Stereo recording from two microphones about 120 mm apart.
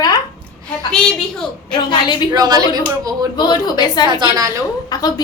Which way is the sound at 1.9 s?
40° left (ahead or behind).